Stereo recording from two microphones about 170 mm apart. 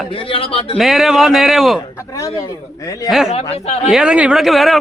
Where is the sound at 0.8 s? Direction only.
Centre (ahead or behind).